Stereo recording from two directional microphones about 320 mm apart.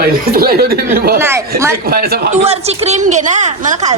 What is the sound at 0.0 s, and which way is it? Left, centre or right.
A woman's voice, right.